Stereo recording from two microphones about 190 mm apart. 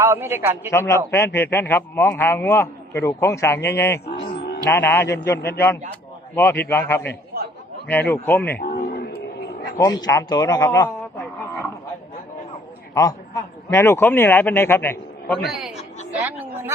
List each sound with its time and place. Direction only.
0.0 s a man's voice: 10° right (ahead or behind)
0.7 s a man's voice: 15° left (ahead or behind)
4.0 s a sound: 55° left (ahead or behind)
4.6 s a man's voice: 10° left (ahead or behind)
5.0 s a man's voice: 65° left (ahead or behind)
6.3 s a man's voice: 10° left (ahead or behind)
8.5 s a sound: 60° left (ahead or behind)
9.7 s a man's voice: 20° left (ahead or behind)
12.9 s a man's voice: 20° left (ahead or behind); by 15.7 s centre (ahead or behind)
16.2 s a sound: 10° right (ahead or behind)